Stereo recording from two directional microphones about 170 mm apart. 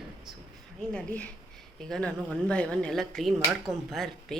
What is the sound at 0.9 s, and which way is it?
Speech, 10° left (ahead or behind).